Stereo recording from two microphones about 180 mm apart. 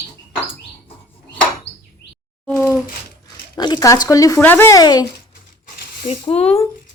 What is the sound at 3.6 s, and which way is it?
Speech, 25° left (ahead or behind).